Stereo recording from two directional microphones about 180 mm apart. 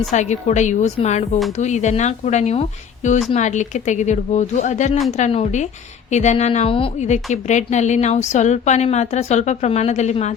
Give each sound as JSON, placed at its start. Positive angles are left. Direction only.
{"t": 0.1, "sound": "a woman's voice", "side_deg": 40}